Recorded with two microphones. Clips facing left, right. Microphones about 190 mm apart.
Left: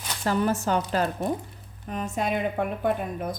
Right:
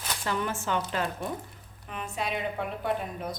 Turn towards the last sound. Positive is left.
turn(degrees=50)  # may be behind; listen again after turning